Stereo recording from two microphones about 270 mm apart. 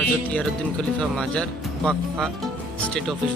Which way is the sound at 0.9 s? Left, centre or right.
Centre.